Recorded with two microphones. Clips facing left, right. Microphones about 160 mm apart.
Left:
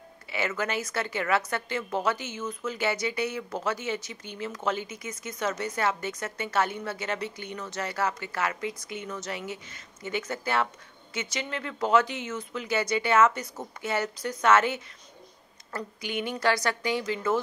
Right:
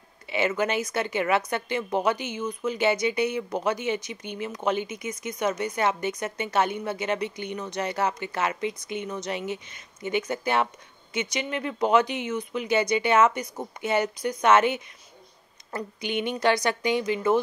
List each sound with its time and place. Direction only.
0.3 s a woman's voice: 20° right (ahead or behind)